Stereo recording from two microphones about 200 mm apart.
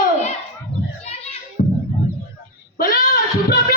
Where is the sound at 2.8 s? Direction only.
45° left (ahead or behind).